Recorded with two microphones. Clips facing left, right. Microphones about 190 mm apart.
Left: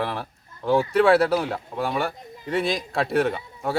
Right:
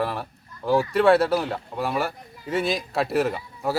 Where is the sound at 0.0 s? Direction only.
Centre (ahead or behind).